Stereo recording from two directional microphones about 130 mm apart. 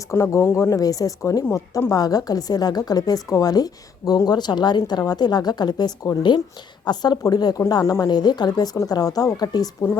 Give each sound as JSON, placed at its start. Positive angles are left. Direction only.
{"t": 0.1, "sound": "a woman's voice", "side_deg": 25}